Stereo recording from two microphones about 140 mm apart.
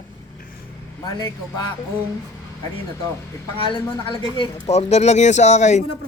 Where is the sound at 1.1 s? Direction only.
30° left (ahead or behind).